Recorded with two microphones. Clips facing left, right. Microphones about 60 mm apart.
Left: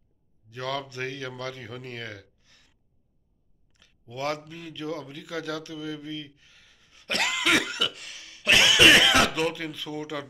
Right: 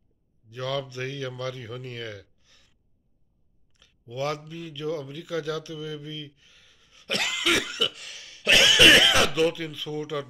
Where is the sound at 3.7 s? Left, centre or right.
Left.